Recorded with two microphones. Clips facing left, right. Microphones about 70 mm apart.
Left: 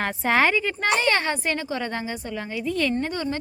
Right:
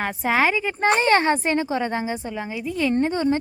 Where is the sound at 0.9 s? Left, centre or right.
Right.